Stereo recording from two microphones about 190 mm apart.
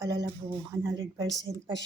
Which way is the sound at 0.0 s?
20° right (ahead or behind).